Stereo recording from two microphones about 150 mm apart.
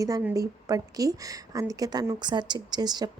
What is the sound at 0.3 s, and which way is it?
Speech, 25° right (ahead or behind).